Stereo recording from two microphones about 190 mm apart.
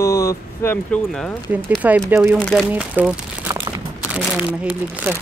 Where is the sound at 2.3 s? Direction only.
5° left (ahead or behind).